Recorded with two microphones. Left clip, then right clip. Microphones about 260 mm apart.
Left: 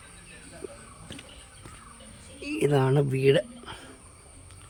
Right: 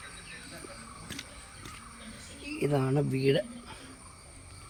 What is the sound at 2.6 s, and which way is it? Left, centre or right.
Speech, centre.